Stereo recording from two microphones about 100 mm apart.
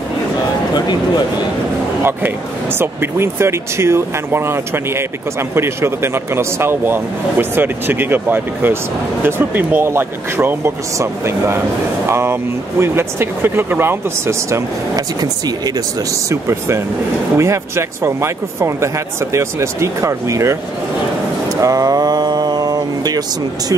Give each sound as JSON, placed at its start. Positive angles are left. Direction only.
{"t": 0.7, "sound": "speech", "side_deg": 45}
{"t": 2.8, "sound": "speech", "side_deg": -25}
{"t": 16.3, "sound": "speech", "side_deg": -30}
{"t": 21.5, "sound": "a sound", "side_deg": -35}